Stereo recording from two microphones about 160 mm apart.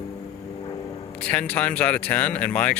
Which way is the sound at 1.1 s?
10° left (ahead or behind).